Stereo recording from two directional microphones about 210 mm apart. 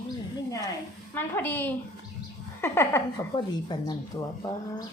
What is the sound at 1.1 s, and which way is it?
Speech, 10° left (ahead or behind).